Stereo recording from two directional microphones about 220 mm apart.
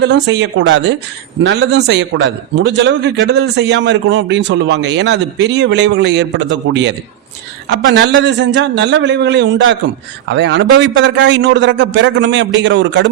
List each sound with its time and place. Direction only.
0.0 s a man's voice: 50° right (ahead or behind)